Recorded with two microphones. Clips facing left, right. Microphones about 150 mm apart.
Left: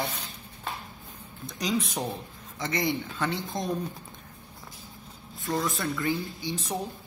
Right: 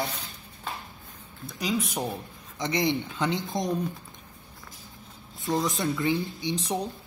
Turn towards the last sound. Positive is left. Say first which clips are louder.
# right 3 dB
turn(degrees=-20)  # may be behind; listen again after turning